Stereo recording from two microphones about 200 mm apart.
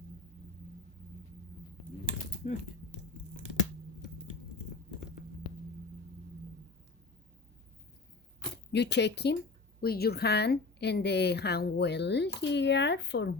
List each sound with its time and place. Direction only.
2.4 s speech: 40° left (ahead or behind)
8.7 s a woman's voice: 60° left (ahead or behind)